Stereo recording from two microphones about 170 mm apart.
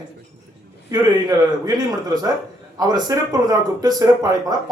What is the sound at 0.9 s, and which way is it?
Speech, 25° right (ahead or behind).